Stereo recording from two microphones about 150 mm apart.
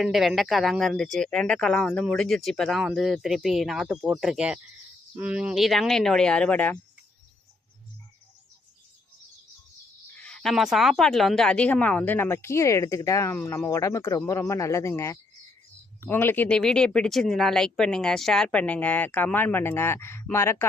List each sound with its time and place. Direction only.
0.0 s speech: centre (ahead or behind)
10.2 s speech: 5° left (ahead or behind)